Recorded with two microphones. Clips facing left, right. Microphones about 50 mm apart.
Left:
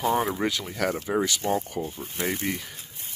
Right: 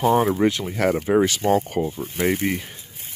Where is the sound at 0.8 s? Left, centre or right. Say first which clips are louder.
Right 7 dB; right.